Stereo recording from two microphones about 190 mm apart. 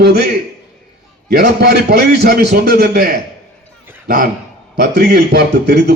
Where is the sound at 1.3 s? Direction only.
55° right (ahead or behind).